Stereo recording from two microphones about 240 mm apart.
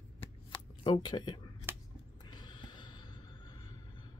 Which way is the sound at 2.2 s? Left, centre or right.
Centre.